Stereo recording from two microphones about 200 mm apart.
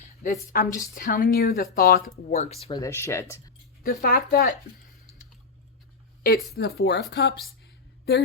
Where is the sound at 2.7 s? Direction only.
15° left (ahead or behind).